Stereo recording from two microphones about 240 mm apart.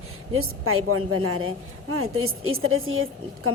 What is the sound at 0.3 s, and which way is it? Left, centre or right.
A woman's voice, right.